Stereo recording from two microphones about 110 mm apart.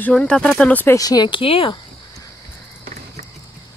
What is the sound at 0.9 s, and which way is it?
Speech, 35° left (ahead or behind).